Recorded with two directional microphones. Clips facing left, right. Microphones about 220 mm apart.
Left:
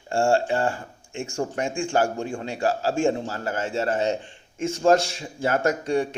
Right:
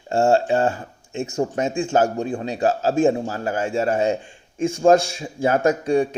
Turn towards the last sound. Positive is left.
turn(degrees=-15)  # may be behind; listen again after turning